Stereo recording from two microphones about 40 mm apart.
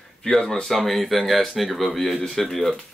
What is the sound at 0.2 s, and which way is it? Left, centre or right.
Speech, centre.